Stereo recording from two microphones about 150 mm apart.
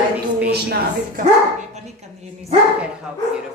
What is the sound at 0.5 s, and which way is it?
Speech, 90° right.